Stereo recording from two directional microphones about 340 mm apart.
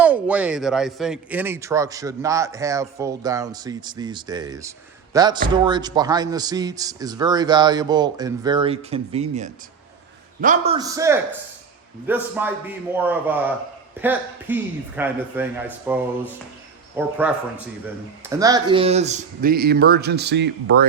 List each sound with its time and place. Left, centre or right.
0.0 s a man's voice: centre
18.2 s speech: centre; by 20.8 s right